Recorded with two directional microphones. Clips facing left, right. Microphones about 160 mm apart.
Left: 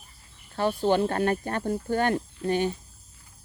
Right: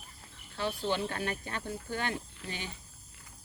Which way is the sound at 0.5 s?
50° left (ahead or behind).